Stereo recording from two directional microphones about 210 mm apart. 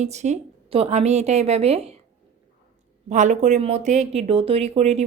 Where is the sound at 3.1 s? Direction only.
35° right (ahead or behind).